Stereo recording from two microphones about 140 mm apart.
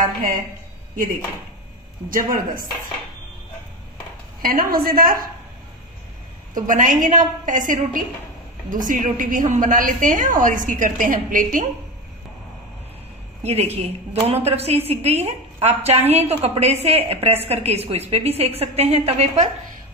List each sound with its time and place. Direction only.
2.0 s a woman's voice: 75° right (ahead or behind)
4.4 s a woman's voice: 90° right
6.5 s a woman's voice: 70° right (ahead or behind)
13.4 s a woman's voice: 50° right (ahead or behind)